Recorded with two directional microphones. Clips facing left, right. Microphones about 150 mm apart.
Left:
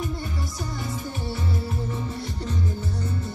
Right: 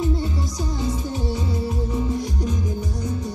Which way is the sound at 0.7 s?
20° right (ahead or behind).